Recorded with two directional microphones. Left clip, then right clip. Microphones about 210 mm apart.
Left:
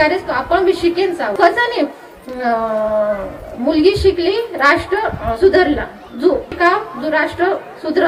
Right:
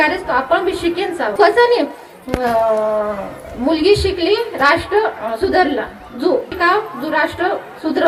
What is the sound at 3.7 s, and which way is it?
A woman's voice, 40° right (ahead or behind).